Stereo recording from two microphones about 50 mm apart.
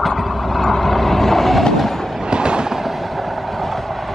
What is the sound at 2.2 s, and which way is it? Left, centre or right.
Train, centre.